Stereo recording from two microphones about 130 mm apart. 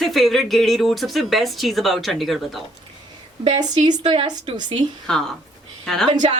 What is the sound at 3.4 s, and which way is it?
Speech, 35° right (ahead or behind).